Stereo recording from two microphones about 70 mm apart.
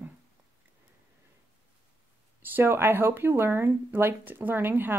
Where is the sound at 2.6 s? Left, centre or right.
Right.